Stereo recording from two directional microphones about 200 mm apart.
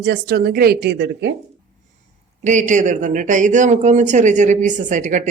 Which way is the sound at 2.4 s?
35° right (ahead or behind).